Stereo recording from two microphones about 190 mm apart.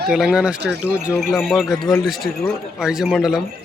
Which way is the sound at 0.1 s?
5° right (ahead or behind).